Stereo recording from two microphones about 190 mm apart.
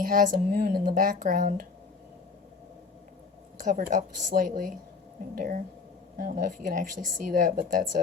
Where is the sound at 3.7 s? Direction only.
45° right (ahead or behind).